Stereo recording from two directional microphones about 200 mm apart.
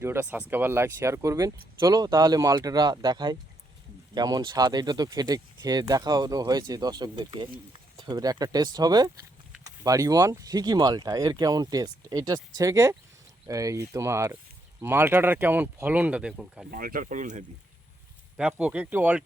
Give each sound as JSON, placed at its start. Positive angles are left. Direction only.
{"t": 0.0, "sound": "speech", "side_deg": -10}
{"t": 16.7, "sound": "speech", "side_deg": -45}
{"t": 18.3, "sound": "speech", "side_deg": -5}